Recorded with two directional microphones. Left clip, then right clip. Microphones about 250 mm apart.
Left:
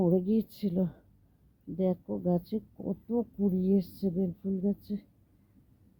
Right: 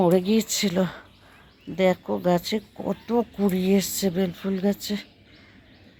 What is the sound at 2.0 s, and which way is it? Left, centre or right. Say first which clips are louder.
Speech: right 10 dB; right.